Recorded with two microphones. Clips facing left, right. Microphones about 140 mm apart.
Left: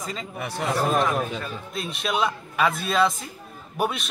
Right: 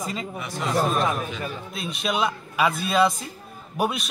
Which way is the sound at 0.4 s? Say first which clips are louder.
Even; 65° left (ahead or behind).